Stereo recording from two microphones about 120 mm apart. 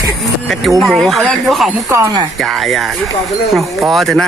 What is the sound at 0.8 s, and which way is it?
Speech, centre (ahead or behind).